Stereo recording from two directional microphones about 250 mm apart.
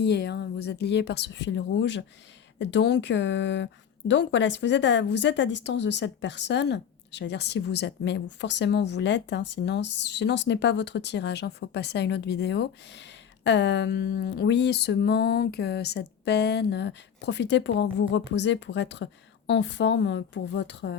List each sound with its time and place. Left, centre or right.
0.0 s a woman's voice: left